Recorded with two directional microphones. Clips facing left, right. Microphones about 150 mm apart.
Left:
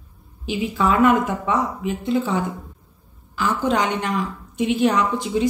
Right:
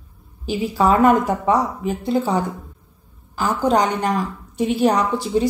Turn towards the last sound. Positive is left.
turn(degrees=-35)  # may be behind; listen again after turning